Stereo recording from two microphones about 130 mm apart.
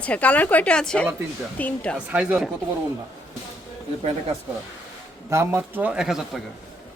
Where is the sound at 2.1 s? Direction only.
10° right (ahead or behind).